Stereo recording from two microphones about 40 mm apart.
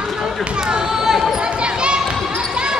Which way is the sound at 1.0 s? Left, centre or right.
Centre.